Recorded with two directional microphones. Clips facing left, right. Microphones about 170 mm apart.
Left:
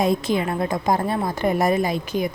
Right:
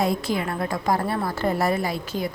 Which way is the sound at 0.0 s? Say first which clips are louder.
Left 3 dB; 20° left (ahead or behind).